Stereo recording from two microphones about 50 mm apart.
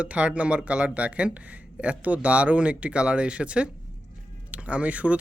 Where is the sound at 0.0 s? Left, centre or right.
Right.